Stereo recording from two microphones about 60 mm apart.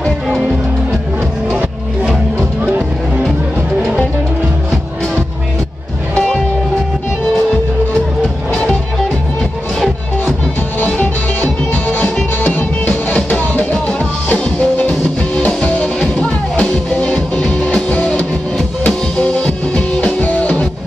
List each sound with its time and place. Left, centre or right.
11.4 s music: left